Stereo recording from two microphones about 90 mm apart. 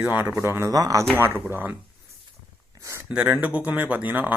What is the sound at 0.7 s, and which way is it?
Speech, 40° right (ahead or behind).